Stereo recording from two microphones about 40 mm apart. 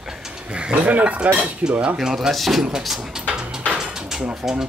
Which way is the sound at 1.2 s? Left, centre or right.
Right.